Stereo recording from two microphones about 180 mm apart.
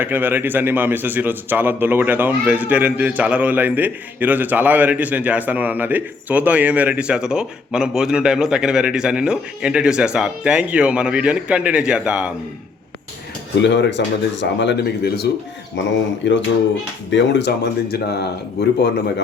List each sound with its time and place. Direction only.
0.0 s a man's voice: 10° right (ahead or behind)
13.6 s speech: 75° left (ahead or behind); by 15.3 s 60° left (ahead or behind)
15.8 s speech: 90° left
17.1 s speech: 75° left (ahead or behind)